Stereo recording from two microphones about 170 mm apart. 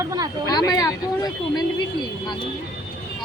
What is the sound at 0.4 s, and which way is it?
Speech, 20° left (ahead or behind).